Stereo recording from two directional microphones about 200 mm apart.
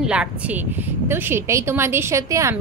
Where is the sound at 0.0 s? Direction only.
5° right (ahead or behind).